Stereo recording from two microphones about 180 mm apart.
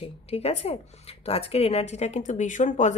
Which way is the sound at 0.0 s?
35° left (ahead or behind).